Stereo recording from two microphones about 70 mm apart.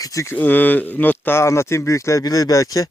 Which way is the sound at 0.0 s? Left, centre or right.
Left.